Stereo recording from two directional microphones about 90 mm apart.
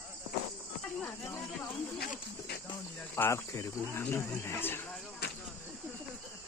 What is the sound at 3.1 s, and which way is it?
Speech, 30° left (ahead or behind).